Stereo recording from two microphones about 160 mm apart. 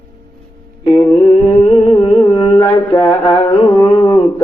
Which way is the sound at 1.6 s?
25° left (ahead or behind).